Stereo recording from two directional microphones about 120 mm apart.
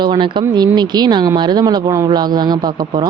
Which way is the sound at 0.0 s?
40° right (ahead or behind).